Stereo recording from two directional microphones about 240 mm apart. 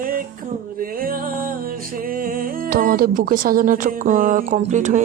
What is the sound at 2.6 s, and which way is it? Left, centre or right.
A woman's voice, right.